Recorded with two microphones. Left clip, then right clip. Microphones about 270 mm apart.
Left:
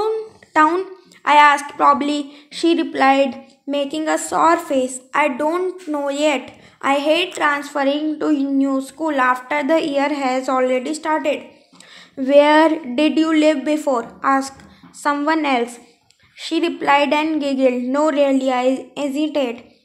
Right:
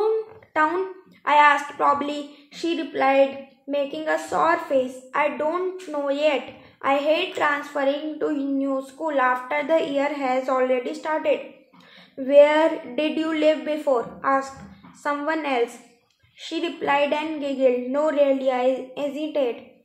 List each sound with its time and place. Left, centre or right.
0.0 s a woman's voice: left